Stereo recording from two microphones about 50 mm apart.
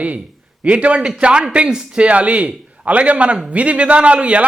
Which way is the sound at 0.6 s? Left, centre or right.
Right.